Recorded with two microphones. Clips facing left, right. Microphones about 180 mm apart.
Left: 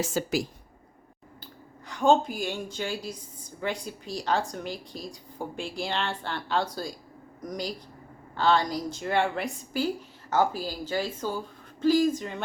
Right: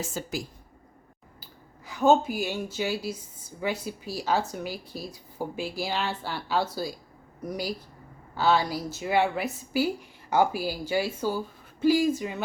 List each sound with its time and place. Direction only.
0.0 s a woman's voice: 80° left
1.9 s a woman's voice: 5° right (ahead or behind)